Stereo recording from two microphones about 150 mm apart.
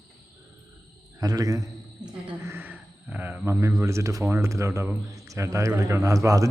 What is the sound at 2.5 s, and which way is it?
A man's voice, 10° right (ahead or behind).